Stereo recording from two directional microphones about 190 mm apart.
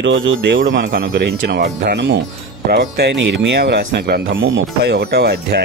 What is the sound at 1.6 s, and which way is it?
Speech, 45° right (ahead or behind).